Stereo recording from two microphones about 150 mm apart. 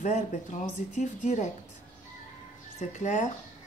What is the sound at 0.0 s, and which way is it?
Speech, 55° left (ahead or behind).